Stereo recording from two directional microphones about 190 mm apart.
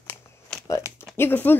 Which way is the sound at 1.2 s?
10° left (ahead or behind).